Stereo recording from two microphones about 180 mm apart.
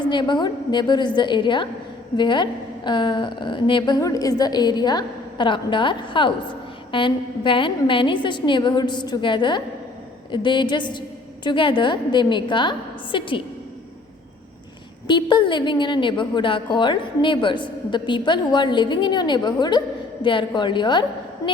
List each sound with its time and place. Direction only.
0.0 s a woman's voice: 25° left (ahead or behind)
15.0 s a woman's voice: 25° left (ahead or behind)
21.4 s a sound: 20° left (ahead or behind)